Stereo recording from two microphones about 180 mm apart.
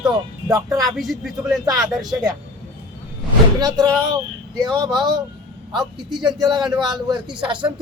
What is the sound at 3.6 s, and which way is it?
Speech, 20° right (ahead or behind).